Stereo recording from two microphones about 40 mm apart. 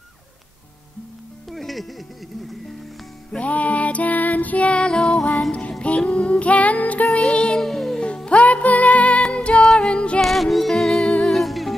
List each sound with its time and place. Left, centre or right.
1.5 s music: centre
3.3 s music: left
4.8 s music: left
5.8 s child singing: left
7.2 s music: left
7.6 s music: centre
8.3 s music: left
10.2 s music: centre